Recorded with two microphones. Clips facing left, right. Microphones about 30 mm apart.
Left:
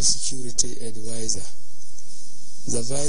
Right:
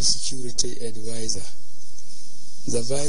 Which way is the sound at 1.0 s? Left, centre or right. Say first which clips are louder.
Even; right.